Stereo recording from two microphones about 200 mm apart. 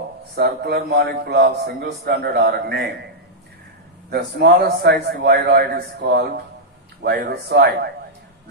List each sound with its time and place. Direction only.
0.4 s a man's voice: 55° right (ahead or behind)
4.1 s a man's voice: 55° right (ahead or behind)